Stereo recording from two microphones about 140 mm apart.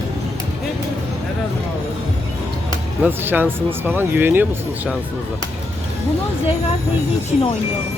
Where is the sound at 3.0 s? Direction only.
15° right (ahead or behind).